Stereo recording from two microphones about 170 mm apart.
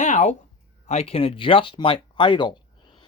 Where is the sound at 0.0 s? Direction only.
45° left (ahead or behind).